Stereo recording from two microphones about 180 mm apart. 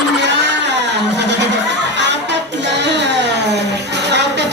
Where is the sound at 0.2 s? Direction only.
75° right (ahead or behind).